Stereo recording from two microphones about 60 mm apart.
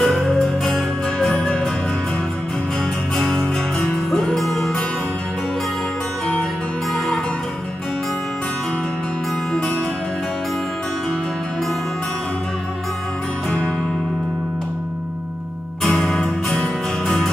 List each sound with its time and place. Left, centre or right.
0.0 s music: centre
3.2 s music: centre
15.8 s music: centre